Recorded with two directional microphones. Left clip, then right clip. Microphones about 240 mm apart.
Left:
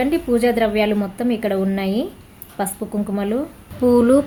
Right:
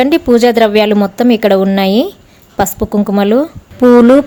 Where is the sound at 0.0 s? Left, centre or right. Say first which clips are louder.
Right 9 dB; right.